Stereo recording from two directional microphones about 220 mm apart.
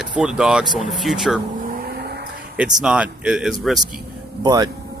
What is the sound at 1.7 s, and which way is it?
Vehicle, 45° right (ahead or behind).